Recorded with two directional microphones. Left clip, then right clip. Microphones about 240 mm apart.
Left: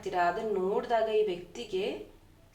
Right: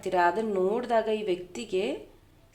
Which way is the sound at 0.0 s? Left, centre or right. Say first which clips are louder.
Right 4 dB; right.